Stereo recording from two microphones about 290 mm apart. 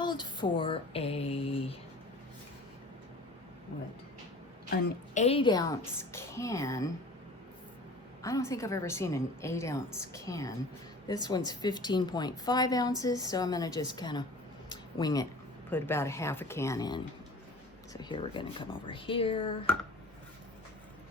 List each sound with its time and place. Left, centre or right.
0.0 s female singing: centre
4.7 s a woman's voice: left
8.2 s a woman's voice: centre
14.7 s a sound: centre
15.7 s a woman's voice: centre